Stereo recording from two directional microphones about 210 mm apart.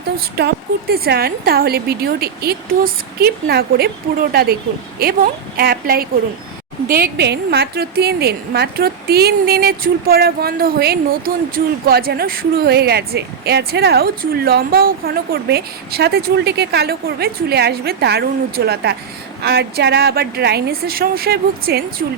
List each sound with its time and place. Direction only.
0.2 s a woman's voice: 50° right (ahead or behind)